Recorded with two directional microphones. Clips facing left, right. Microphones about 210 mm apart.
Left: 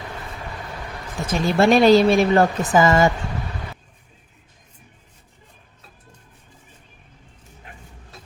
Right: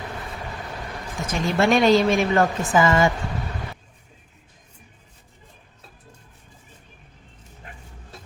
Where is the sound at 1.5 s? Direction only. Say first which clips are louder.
Left 4 dB; 35° left (ahead or behind).